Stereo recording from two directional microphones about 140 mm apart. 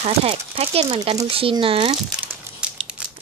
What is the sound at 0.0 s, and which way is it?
Speech, 45° right (ahead or behind).